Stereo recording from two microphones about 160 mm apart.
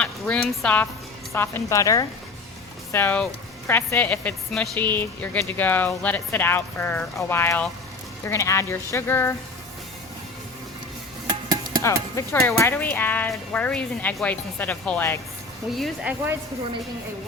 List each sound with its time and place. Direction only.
0.0 s a sound: 5° left (ahead or behind)
1.3 s a woman's voice: 15° left (ahead or behind)
11.8 s a woman's voice: 20° left (ahead or behind)
15.7 s speech: centre (ahead or behind)